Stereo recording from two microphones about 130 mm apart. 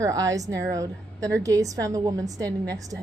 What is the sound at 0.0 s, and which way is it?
A woman's voice, 25° right (ahead or behind).